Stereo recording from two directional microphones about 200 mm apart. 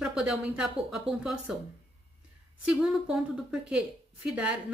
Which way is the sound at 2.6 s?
5° right (ahead or behind).